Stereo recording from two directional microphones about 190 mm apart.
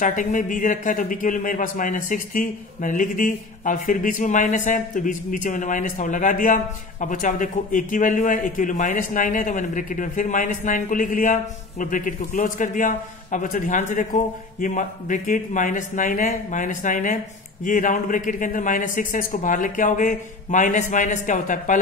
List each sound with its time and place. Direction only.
0.0 s a man's voice: 45° left (ahead or behind)